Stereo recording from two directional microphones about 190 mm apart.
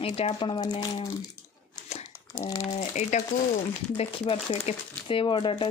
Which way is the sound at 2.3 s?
15° left (ahead or behind).